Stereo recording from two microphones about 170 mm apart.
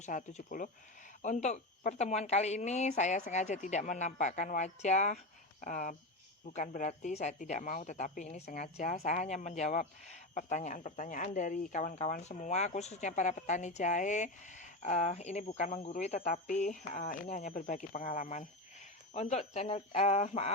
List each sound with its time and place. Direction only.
0.0 s speech: 45° left (ahead or behind)